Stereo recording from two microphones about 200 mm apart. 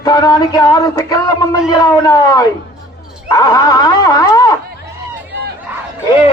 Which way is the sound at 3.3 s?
15° left (ahead or behind).